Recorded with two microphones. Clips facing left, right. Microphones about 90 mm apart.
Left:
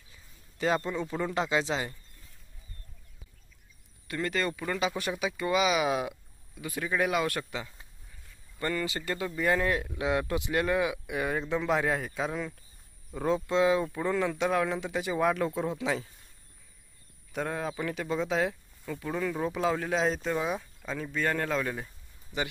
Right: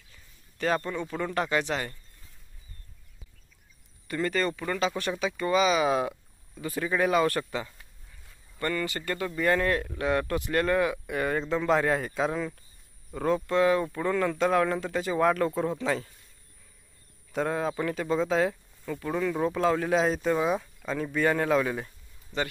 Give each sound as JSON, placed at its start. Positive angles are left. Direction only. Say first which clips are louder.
{"t": 0.1, "sound": "speech", "louder": "left 2 dB", "side_deg": 15}
{"t": 4.1, "sound": "speech", "louder": "right 3 dB", "side_deg": 0}
{"t": 8.5, "sound": "speech", "louder": "right 1 dB", "side_deg": 15}
{"t": 13.1, "sound": "speech", "louder": "right 2 dB", "side_deg": 15}
{"t": 17.3, "sound": "speech", "louder": "right 4 dB", "side_deg": 0}
{"t": 22.3, "sound": "speech", "louder": "right 2 dB", "side_deg": 15}